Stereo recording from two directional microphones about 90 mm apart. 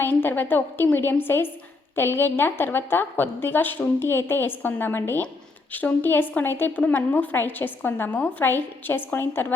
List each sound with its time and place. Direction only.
0.0 s a woman's voice: 25° left (ahead or behind)